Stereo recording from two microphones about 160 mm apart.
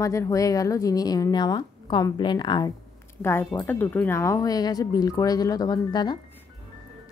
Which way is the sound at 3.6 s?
10° left (ahead or behind).